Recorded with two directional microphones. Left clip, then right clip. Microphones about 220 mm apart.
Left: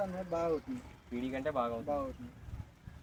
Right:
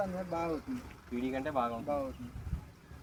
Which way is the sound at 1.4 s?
25° left (ahead or behind).